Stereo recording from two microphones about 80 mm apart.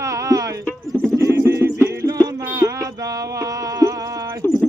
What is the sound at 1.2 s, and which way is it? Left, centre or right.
Music, right.